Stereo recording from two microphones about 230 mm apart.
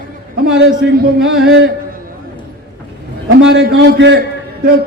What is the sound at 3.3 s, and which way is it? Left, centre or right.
Speech, right.